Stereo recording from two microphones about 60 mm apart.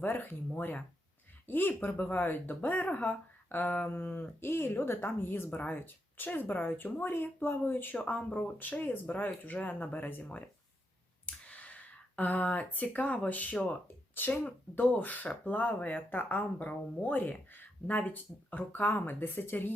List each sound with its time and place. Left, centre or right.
0.0 s speech: left
7.9 s speech: left
10.2 s speech: centre; by 19.7 s left